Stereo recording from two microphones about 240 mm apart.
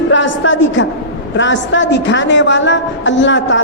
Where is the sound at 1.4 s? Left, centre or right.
Left.